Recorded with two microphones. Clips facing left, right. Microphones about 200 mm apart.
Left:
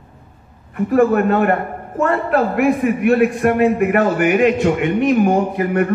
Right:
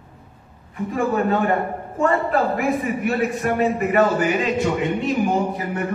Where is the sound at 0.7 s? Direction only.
65° left (ahead or behind).